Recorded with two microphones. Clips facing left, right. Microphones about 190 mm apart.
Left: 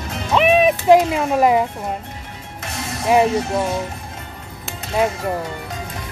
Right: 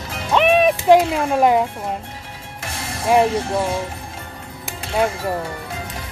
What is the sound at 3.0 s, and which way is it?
Speech, centre (ahead or behind).